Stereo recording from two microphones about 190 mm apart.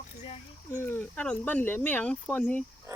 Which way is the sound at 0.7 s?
10° left (ahead or behind).